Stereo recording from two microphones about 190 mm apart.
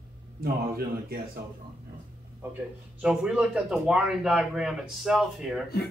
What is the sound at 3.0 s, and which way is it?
A man's voice, 5° right (ahead or behind).